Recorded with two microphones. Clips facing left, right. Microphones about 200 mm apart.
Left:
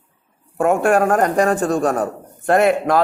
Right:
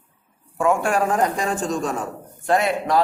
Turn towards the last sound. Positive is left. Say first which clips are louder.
# left 4 dB
turn(degrees=55)  # may be behind; listen again after turning